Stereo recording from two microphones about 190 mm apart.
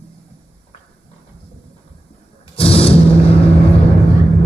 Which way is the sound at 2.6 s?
30° left (ahead or behind).